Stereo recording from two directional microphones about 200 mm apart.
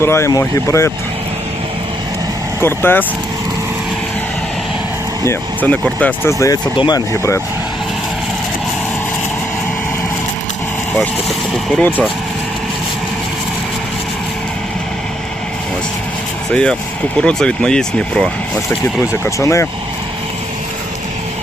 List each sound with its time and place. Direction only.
0.0 s speech: 15° left (ahead or behind)
2.6 s speech: 10° left (ahead or behind)
5.2 s speech: 10° left (ahead or behind)
10.9 s speech: centre (ahead or behind)
16.5 s speech: 5° left (ahead or behind)
19.2 s speech: 15° left (ahead or behind)